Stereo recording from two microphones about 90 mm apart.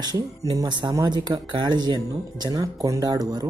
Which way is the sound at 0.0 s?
45° right (ahead or behind).